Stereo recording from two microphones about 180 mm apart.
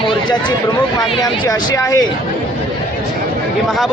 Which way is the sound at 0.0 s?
25° left (ahead or behind).